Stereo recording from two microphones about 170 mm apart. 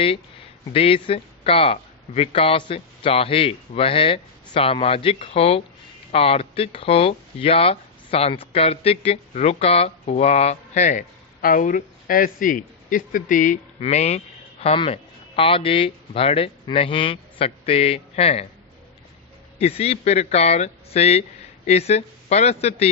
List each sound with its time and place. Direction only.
0.7 s speech: 35° left (ahead or behind); by 13.6 s 50° left (ahead or behind)
13.7 s speech: 40° left (ahead or behind)
19.5 s speech: 40° left (ahead or behind)